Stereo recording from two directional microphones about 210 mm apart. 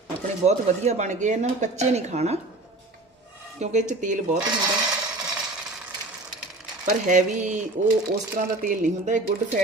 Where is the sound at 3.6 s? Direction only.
35° right (ahead or behind).